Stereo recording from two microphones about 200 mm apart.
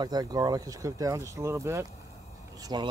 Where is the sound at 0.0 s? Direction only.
20° right (ahead or behind).